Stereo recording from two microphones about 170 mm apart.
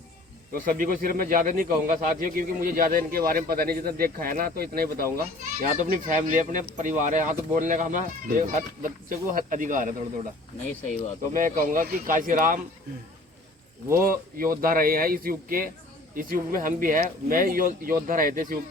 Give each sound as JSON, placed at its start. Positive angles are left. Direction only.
{"t": 0.5, "sound": "speech", "side_deg": -55}
{"t": 11.3, "sound": "speech", "side_deg": -55}
{"t": 13.9, "sound": "speech", "side_deg": -55}